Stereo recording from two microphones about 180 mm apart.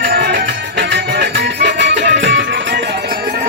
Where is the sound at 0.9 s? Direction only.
70° right (ahead or behind).